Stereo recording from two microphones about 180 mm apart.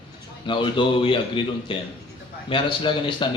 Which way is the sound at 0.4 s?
25° left (ahead or behind).